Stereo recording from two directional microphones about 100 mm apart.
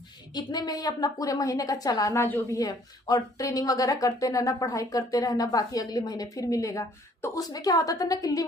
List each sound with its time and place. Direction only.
0.3 s speech: 40° left (ahead or behind)
2.0 s a woman's voice: 20° left (ahead or behind)
2.6 s speech: 40° left (ahead or behind)